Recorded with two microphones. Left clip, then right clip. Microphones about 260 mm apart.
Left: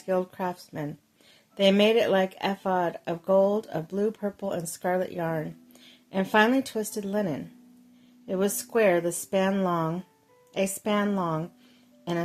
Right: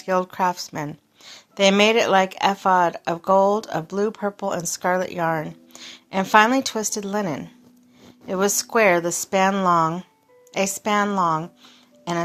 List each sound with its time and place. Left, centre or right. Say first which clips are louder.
0.0 s speech: right 7 dB; centre